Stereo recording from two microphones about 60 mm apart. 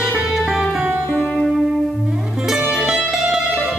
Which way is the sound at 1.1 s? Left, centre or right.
Centre.